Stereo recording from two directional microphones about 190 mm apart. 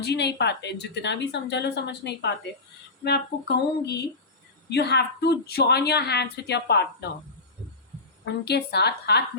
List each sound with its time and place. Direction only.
0.0 s a woman's voice: 60° left (ahead or behind)
8.2 s a woman's voice: 60° left (ahead or behind)